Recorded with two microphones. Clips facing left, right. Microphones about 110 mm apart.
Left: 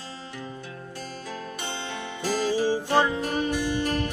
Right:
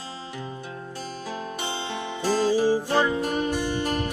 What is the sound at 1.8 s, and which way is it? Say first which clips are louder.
Music: right 4 dB; 25° right (ahead or behind).